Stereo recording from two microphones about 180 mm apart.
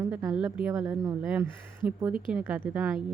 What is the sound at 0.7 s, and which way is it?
Speech, 20° right (ahead or behind).